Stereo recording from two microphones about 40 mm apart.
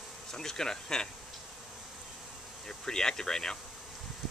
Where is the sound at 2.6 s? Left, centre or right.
Centre.